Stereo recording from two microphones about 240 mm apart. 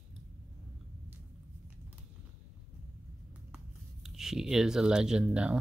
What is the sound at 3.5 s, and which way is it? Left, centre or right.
Speech, centre.